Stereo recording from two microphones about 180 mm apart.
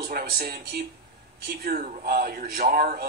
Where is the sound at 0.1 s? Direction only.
55° right (ahead or behind).